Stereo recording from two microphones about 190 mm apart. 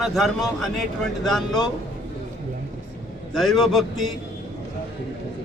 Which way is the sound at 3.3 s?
Centre (ahead or behind).